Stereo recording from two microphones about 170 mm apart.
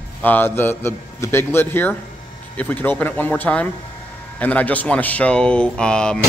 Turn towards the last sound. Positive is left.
turn(degrees=5)  # may be behind; listen again after turning